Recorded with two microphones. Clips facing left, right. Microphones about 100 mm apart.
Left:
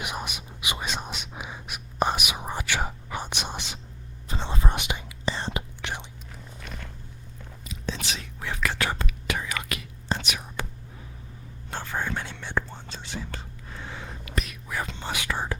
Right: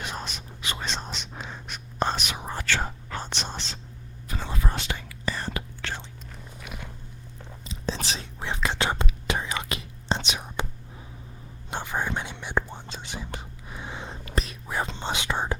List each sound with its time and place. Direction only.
0.0 s whispering: 15° left (ahead or behind)
4.3 s whispering: 25° left (ahead or behind)
6.6 s biting: 10° right (ahead or behind)
7.6 s whispering: 30° right (ahead or behind)
11.7 s whispering: 15° right (ahead or behind)
14.3 s whispering: 30° right (ahead or behind)